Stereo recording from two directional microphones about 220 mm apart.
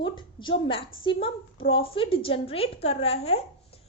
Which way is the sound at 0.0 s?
20° left (ahead or behind).